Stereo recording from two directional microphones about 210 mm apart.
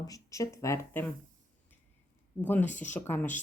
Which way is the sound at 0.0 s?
15° left (ahead or behind).